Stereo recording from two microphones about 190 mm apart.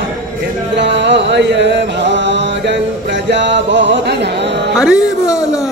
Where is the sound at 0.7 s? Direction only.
65° right (ahead or behind).